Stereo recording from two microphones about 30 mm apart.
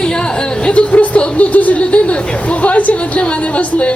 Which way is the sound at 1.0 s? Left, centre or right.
Left.